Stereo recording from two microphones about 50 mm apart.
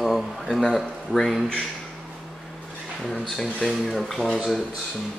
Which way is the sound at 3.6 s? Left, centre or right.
Centre.